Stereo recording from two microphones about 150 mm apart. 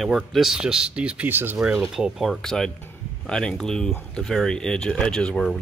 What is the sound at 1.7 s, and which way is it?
Speech, centre (ahead or behind).